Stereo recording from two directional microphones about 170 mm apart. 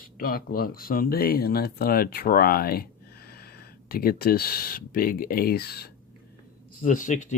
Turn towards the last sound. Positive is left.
turn(degrees=45)  # may be behind; listen again after turning